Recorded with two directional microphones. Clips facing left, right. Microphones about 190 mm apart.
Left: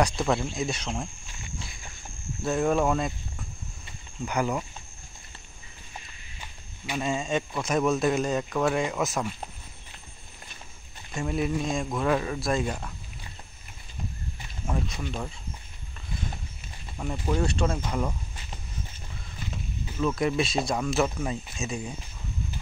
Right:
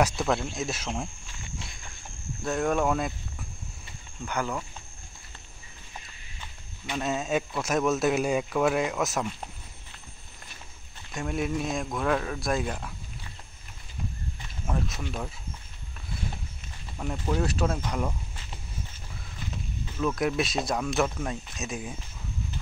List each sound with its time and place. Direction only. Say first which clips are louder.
0.0 s speech: even; centre (ahead or behind)
2.4 s speech: left 2 dB; 5° left (ahead or behind)
4.2 s speech: left 3 dB; 10° left (ahead or behind)
7.0 s speech: even; 5° right (ahead or behind)
11.1 s speech: left 2 dB; centre (ahead or behind)
14.7 s speech: left 1 dB; centre (ahead or behind)
17.0 s speech: left 1 dB; centre (ahead or behind)
20.0 s speech: left 1 dB; centre (ahead or behind)